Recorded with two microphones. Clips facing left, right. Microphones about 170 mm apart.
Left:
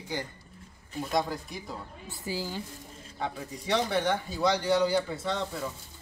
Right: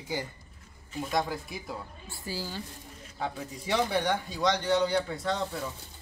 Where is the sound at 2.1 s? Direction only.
15° left (ahead or behind).